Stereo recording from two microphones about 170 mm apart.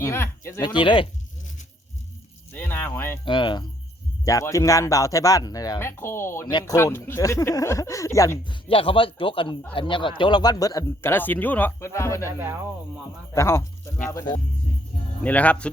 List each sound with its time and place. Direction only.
0.0 s speech: 15° left (ahead or behind)
0.7 s speech: 30° left (ahead or behind)
2.5 s a sound: 10° left (ahead or behind)
3.2 s speech: 30° left (ahead or behind)
8.6 s speech: 30° left (ahead or behind); by 12.3 s 15° left (ahead or behind)
13.3 s speech: 15° left (ahead or behind)
15.2 s speech: 10° left (ahead or behind)